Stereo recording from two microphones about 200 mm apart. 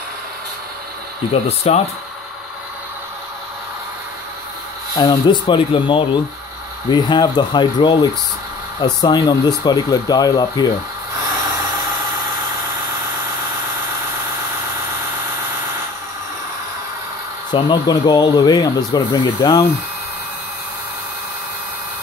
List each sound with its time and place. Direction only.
1.3 s speech: 30° left (ahead or behind)
4.9 s speech: 20° left (ahead or behind)
17.5 s speech: 20° left (ahead or behind)